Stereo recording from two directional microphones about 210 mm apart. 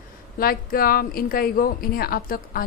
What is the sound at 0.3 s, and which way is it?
A woman's voice, 45° left (ahead or behind).